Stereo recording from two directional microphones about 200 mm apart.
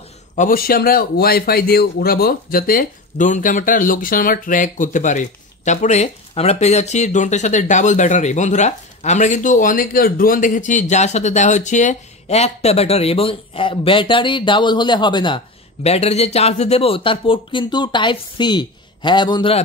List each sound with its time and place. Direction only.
0.4 s speech: 45° left (ahead or behind); by 19.6 s 25° left (ahead or behind)